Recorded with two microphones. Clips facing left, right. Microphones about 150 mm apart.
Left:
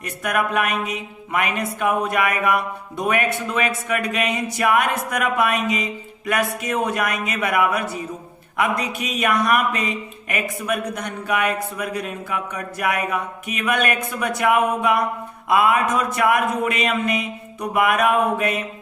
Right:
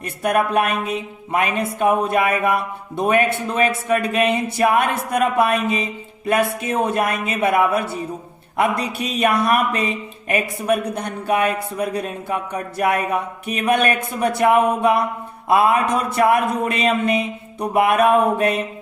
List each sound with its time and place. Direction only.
0.2 s speech: 35° right (ahead or behind)